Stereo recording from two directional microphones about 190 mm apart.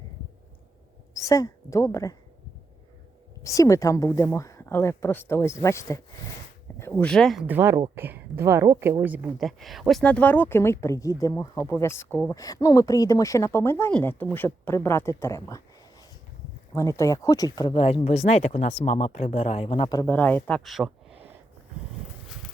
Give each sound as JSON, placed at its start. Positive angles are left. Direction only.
{"t": 1.1, "sound": "a woman's voice", "side_deg": 15}
{"t": 3.4, "sound": "speech", "side_deg": 15}
{"t": 16.7, "sound": "speech", "side_deg": 15}
{"t": 20.1, "sound": "speech", "side_deg": 10}